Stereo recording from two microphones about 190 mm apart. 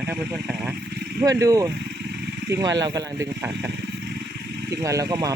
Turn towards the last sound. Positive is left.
turn(degrees=-20)  # may be behind; listen again after turning